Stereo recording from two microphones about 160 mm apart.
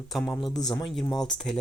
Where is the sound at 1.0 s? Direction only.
25° left (ahead or behind).